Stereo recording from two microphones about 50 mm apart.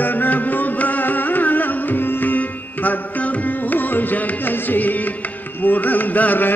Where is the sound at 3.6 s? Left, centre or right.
Left.